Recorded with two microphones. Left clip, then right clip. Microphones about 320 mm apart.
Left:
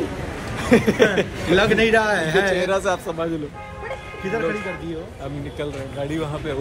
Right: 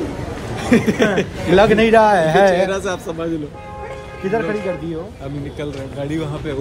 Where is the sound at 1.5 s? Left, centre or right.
Right.